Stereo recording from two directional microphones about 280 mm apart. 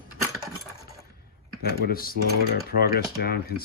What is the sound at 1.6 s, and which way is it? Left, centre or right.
Speech, left.